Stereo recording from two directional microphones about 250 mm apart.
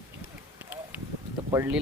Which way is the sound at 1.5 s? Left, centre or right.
Centre.